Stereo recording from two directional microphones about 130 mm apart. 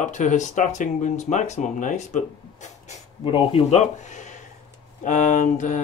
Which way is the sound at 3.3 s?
45° left (ahead or behind).